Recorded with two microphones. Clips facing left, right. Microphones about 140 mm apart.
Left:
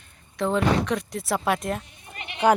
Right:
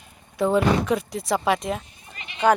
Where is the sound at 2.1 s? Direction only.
60° left (ahead or behind).